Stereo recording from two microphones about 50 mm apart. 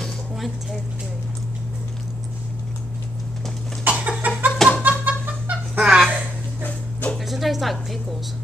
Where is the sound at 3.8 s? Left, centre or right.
Right.